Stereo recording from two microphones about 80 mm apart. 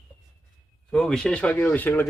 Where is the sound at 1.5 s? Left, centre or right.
Left.